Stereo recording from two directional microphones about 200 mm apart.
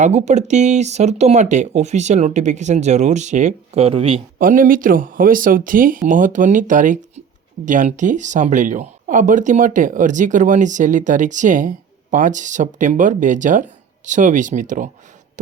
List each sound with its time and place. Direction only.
0.0 s speech: 35° right (ahead or behind)
4.4 s speech: 45° right (ahead or behind)